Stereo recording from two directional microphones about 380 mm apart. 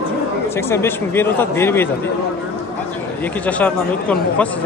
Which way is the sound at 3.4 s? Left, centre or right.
Centre.